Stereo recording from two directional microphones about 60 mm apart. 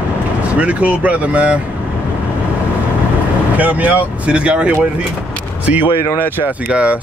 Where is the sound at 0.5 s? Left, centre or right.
Right.